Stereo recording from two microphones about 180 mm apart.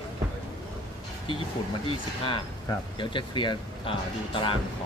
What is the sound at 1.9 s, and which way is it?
Speech, 30° left (ahead or behind).